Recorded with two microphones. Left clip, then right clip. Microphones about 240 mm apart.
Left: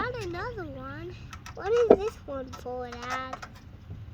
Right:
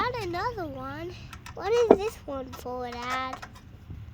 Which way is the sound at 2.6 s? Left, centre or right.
Right.